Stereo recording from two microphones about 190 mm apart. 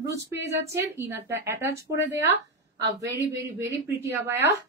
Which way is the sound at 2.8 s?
20° right (ahead or behind).